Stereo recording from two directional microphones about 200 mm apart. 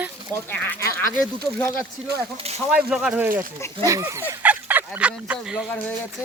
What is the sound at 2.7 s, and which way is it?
Speech, 5° right (ahead or behind).